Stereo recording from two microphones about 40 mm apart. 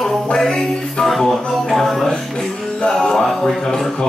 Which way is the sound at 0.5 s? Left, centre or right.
Centre.